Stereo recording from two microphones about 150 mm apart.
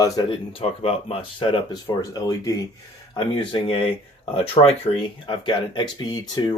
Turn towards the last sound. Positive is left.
turn(degrees=30)  # may be behind; listen again after turning